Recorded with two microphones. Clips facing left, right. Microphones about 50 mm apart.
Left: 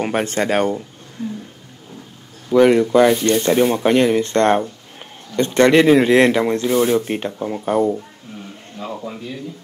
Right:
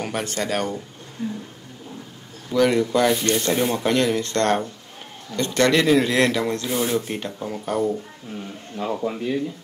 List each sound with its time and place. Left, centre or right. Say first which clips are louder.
0.0 s speech: left 7 dB; left
2.5 s speech: left 7 dB; left
8.8 s speech: right 3 dB; centre